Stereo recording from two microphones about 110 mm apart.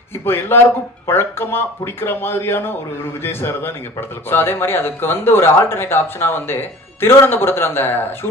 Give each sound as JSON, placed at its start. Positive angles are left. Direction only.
{"t": 0.2, "sound": "speech", "side_deg": 20}